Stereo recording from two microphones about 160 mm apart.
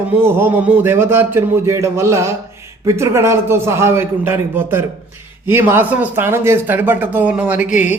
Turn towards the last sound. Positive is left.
turn(degrees=-10)  # may be behind; listen again after turning